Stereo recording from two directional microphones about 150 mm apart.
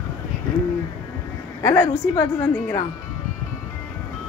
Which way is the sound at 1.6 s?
15° left (ahead or behind).